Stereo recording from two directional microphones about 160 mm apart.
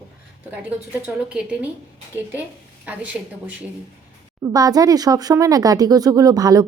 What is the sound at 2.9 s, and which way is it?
Speech, 10° right (ahead or behind).